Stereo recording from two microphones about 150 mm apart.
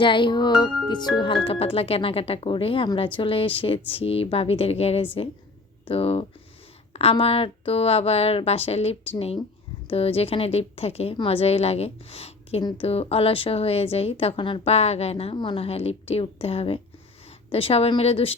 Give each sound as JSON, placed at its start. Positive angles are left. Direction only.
{"t": 0.0, "sound": "speech", "side_deg": 35}